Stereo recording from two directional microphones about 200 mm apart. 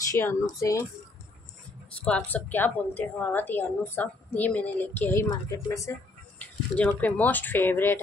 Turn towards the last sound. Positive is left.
turn(degrees=10)  # may be behind; listen again after turning